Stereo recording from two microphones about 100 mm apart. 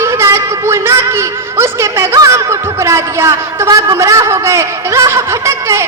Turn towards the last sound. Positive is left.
turn(degrees=-30)  # may be behind; listen again after turning